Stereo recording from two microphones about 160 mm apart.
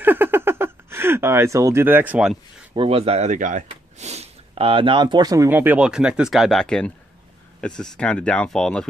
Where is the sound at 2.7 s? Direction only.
35° right (ahead or behind).